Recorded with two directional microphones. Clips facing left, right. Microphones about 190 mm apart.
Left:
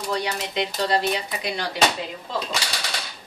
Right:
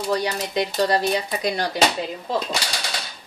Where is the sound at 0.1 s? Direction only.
40° right (ahead or behind).